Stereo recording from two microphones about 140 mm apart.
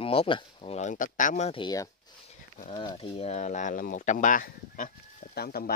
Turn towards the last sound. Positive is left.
turn(degrees=90)